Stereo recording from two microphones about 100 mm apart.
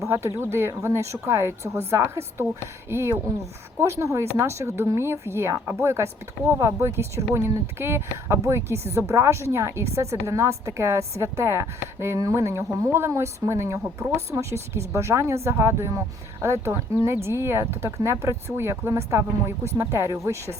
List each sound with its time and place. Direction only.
0.0 s speech: 30° right (ahead or behind)